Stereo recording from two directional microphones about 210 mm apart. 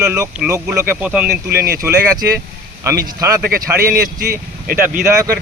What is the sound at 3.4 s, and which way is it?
Speech, 45° right (ahead or behind).